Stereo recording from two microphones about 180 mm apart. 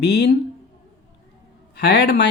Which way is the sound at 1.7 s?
65° left (ahead or behind).